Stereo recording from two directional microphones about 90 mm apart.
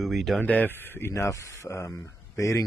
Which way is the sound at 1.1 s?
35° left (ahead or behind).